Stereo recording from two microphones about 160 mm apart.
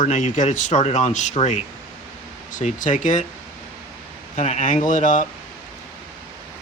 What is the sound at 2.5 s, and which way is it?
Speech, 55° left (ahead or behind).